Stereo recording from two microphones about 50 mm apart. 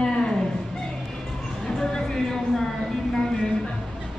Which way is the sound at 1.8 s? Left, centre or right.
Centre.